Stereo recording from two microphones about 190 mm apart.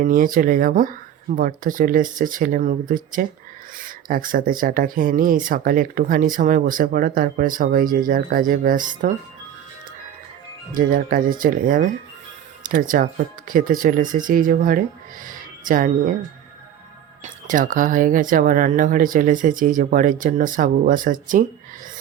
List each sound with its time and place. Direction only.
0.0 s speech: 45° right (ahead or behind)
10.8 s speech: 45° right (ahead or behind)
17.2 s speech: 45° right (ahead or behind)